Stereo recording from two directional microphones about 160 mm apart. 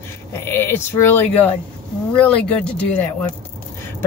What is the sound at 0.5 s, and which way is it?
A woman's voice, 15° left (ahead or behind).